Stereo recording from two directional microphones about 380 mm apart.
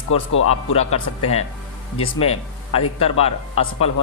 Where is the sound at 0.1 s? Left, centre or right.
Left.